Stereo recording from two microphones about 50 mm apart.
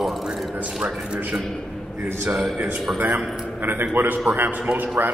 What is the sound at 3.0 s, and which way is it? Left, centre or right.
A man's voice, right.